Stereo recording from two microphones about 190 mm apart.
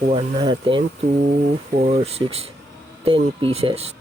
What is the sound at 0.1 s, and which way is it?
Speech, 25° right (ahead or behind).